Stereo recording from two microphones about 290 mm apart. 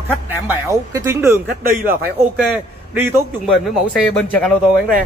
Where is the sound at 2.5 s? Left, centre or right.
Centre.